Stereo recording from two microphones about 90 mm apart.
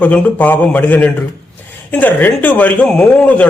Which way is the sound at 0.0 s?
20° left (ahead or behind).